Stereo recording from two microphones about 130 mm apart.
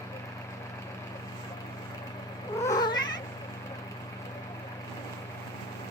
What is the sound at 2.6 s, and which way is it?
Babbling, 30° left (ahead or behind).